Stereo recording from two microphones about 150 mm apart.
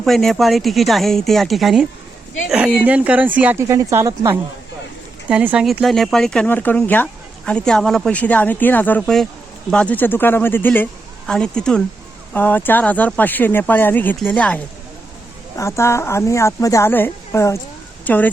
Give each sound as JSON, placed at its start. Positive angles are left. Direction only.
{"t": 0.0, "sound": "speech", "side_deg": 0}
{"t": 5.3, "sound": "speech", "side_deg": -10}
{"t": 15.5, "sound": "a woman's voice", "side_deg": 20}